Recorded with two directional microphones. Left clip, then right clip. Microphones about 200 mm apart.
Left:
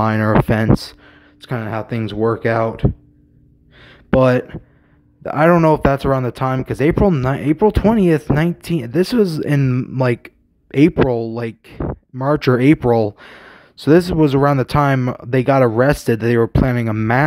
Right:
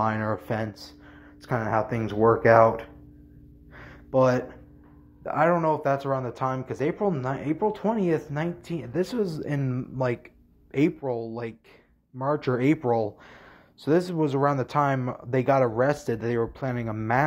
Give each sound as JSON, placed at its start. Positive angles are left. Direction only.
{"t": 0.0, "sound": "speech", "side_deg": 55}
{"t": 1.5, "sound": "speech", "side_deg": 30}
{"t": 3.9, "sound": "a sound", "side_deg": 65}
{"t": 5.2, "sound": "speech", "side_deg": 55}